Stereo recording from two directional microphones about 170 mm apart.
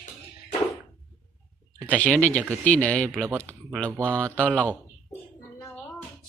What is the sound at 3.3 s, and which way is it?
Speech, 15° right (ahead or behind).